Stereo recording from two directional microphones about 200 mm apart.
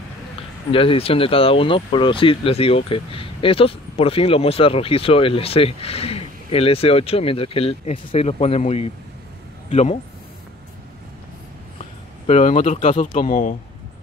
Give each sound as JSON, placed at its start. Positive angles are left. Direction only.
{"t": 0.7, "sound": "speech", "side_deg": 25}
{"t": 11.8, "sound": "speech", "side_deg": 35}